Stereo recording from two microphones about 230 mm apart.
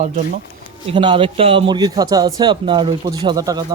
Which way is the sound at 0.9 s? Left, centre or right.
Right.